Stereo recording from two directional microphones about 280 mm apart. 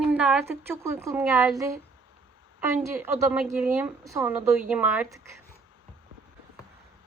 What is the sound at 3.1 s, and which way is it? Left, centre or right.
A woman's voice, centre.